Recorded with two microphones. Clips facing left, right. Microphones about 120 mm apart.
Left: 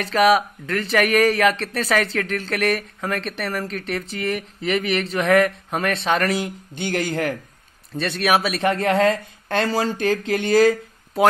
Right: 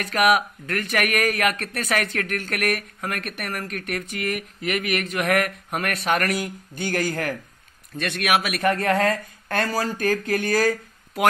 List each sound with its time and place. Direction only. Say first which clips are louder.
0.0 s speech: left 3 dB; 30° left (ahead or behind)